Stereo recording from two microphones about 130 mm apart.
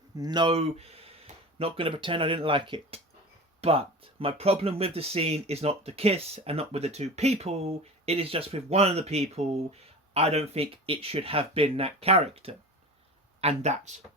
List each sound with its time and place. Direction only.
0.2 s speech: 35° right (ahead or behind)
0.5 s speech: 50° right (ahead or behind)